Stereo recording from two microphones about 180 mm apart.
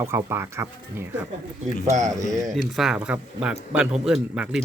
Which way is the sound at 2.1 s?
20° right (ahead or behind).